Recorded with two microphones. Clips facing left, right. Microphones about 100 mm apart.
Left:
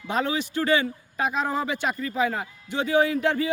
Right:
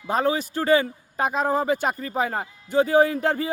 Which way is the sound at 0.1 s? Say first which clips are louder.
Right 3 dB; 40° right (ahead or behind).